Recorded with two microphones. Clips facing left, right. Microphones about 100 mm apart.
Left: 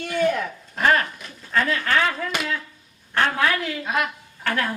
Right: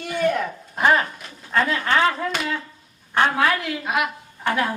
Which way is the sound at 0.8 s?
15° right (ahead or behind).